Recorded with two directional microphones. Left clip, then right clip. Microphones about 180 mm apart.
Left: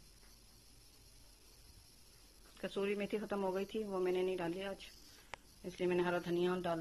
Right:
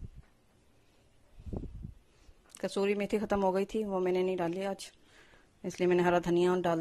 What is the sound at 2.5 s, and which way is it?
A woman's voice, 40° right (ahead or behind).